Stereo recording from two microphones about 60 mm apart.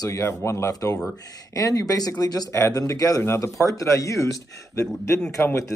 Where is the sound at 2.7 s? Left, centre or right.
Left.